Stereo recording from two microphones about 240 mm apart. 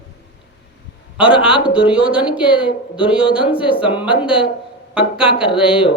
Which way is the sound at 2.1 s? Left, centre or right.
Centre.